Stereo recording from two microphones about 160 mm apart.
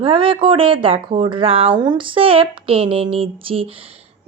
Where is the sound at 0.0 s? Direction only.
35° right (ahead or behind).